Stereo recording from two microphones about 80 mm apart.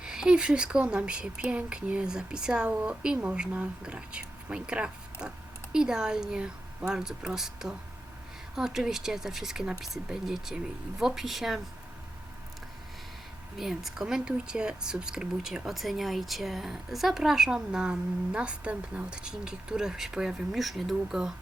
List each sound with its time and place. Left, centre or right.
0.0 s speech: centre
13.6 s speech: centre